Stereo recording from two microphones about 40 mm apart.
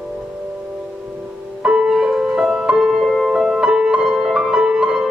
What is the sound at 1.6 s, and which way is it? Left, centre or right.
Music, centre.